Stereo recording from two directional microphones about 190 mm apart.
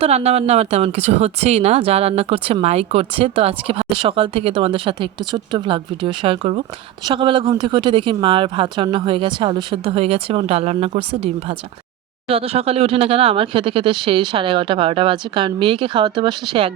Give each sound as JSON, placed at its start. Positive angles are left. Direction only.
{"t": 0.0, "sound": "speech", "side_deg": -35}